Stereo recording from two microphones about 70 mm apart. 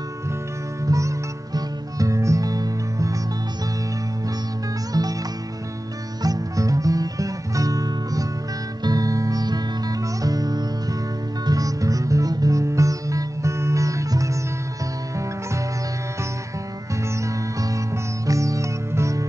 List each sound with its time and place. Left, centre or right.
0.8 s music: right
4.9 s music: right
6.2 s music: right
17.2 s music: right